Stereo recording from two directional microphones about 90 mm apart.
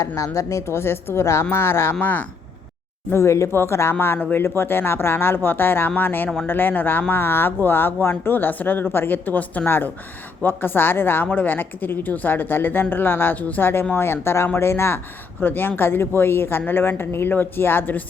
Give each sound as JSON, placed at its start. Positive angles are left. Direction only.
{"t": 0.2, "sound": "a woman's voice", "side_deg": 35}
{"t": 3.1, "sound": "a woman's voice", "side_deg": 30}